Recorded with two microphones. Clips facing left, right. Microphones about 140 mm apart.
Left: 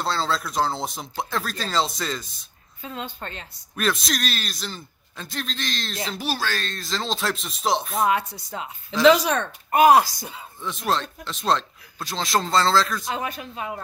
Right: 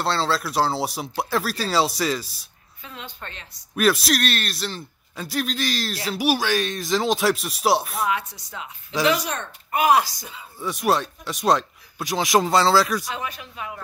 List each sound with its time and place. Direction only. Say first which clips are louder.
0.0 s speech: right 2 dB; centre (ahead or behind)
2.8 s a woman's voice: left 5 dB; 30° left (ahead or behind)
3.7 s speech: right 5 dB; 5° right (ahead or behind)
8.0 s speech: left 3 dB; 50° left (ahead or behind)
9.0 s speech: left 6 dB; 90° left
9.7 s speech: left 4 dB; 45° left (ahead or behind)
10.6 s speech: right 4 dB; 10° right (ahead or behind)
13.4 s a woman's voice: left 3 dB; 30° left (ahead or behind)